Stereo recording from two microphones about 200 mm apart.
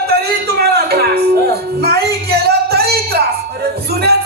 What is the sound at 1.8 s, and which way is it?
Music, 55° right (ahead or behind).